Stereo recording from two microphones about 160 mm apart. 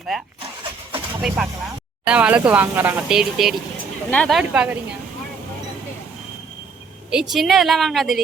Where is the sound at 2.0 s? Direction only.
10° right (ahead or behind).